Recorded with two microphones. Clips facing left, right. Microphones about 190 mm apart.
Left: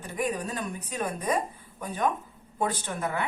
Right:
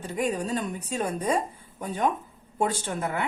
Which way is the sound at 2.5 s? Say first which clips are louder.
Right 3 dB; 25° right (ahead or behind).